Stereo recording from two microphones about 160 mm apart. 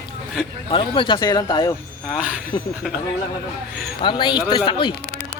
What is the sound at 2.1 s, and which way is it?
Speech, 5° right (ahead or behind).